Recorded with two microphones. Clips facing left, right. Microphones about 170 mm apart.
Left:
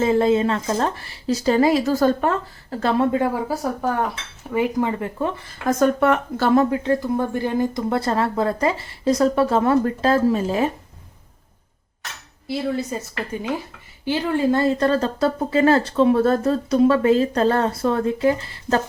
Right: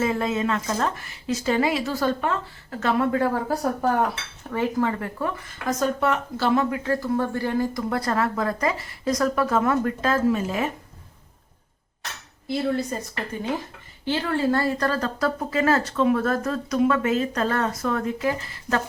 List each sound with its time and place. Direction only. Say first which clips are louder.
0.0 s speech: left 6 dB; 30° left (ahead or behind)
3.1 s speech: left 2 dB; 20° left (ahead or behind)
3.5 s speech: even; centre (ahead or behind)
4.5 s a woman's voice: left 3 dB; 15° left (ahead or behind)
5.6 s speech: left 6 dB; 55° left (ahead or behind)
6.7 s a woman's voice: left 4 dB; 25° left (ahead or behind)
12.5 s speech: left 1 dB; 5° left (ahead or behind)
14.0 s a woman's voice: left 3 dB; 10° left (ahead or behind); by 18.8 s 30° left (ahead or behind)